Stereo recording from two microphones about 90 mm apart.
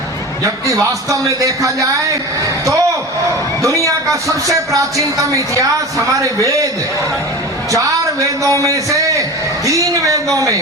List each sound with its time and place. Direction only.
0.4 s a man's voice: 40° right (ahead or behind)
4.3 s a man's voice: 40° right (ahead or behind)
7.7 s a man's voice: 35° right (ahead or behind)
9.6 s a sound: 35° right (ahead or behind)
10.3 s a man's voice: 35° right (ahead or behind)